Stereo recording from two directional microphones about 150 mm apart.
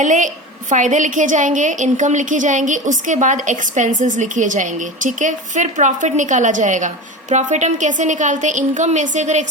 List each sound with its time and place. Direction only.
0.0 s a woman's voice: 55° right (ahead or behind)